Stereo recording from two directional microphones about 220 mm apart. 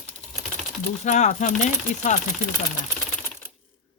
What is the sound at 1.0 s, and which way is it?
Speech, 35° left (ahead or behind).